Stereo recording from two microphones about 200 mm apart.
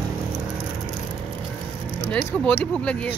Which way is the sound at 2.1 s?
5° left (ahead or behind).